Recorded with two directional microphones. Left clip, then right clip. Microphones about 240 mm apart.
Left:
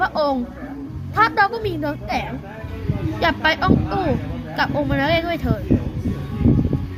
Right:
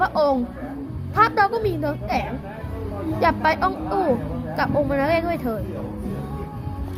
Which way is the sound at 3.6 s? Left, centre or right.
Left.